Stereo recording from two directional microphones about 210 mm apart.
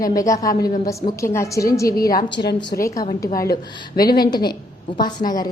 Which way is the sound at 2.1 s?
50° left (ahead or behind).